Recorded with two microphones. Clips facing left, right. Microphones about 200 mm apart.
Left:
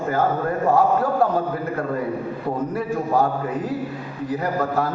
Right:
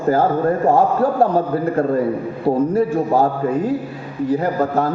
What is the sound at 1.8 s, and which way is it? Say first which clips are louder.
A man's voice: right 8 dB; 25° right (ahead or behind).